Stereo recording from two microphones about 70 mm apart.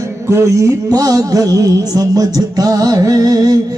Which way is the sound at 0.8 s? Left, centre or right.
Right.